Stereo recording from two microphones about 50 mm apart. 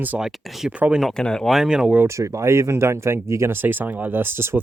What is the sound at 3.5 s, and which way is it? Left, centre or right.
Speech, right.